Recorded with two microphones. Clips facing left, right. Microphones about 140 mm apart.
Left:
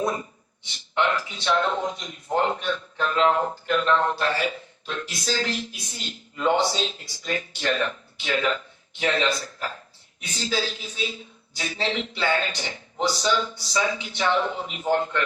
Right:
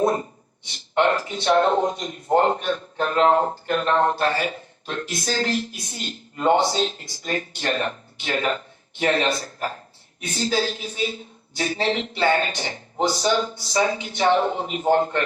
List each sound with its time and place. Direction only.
0.0 s a man's voice: 45° right (ahead or behind)